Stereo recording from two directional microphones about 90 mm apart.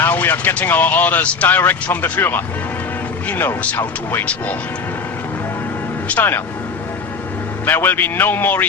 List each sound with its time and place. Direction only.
0.0 s speech: 20° left (ahead or behind)
6.1 s speech: 20° left (ahead or behind)
7.6 s speech: 25° left (ahead or behind)